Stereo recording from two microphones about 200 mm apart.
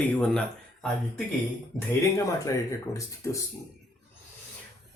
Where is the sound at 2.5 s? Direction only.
15° left (ahead or behind).